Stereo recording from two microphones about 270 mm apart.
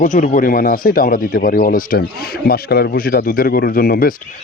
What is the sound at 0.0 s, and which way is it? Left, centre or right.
Speech, left.